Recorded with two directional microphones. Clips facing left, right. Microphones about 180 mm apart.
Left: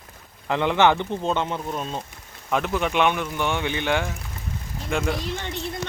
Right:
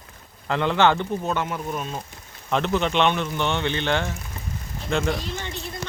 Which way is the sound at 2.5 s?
5° left (ahead or behind).